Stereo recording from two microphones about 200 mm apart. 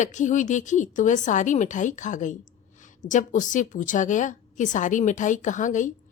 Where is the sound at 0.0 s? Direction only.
40° left (ahead or behind).